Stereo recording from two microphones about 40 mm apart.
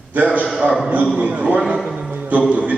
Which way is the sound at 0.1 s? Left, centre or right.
Right.